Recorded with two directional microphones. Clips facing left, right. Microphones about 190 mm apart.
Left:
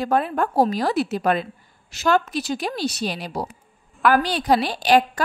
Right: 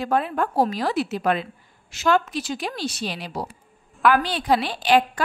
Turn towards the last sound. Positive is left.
turn(degrees=40)  # may be behind; listen again after turning